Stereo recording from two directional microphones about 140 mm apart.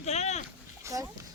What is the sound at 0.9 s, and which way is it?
Speech, 25° right (ahead or behind).